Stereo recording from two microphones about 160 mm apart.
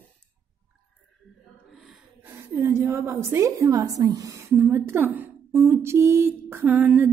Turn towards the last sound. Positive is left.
turn(degrees=-15)  # may be behind; listen again after turning